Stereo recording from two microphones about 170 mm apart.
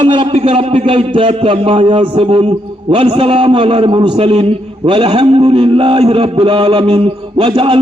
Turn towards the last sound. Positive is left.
turn(degrees=-30)  # may be behind; listen again after turning